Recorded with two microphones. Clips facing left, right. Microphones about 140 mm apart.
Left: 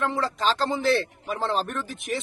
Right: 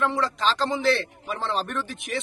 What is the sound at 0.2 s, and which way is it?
Speech, 45° left (ahead or behind).